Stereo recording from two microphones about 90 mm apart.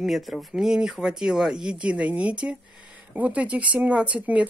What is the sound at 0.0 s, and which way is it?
Speech, centre (ahead or behind).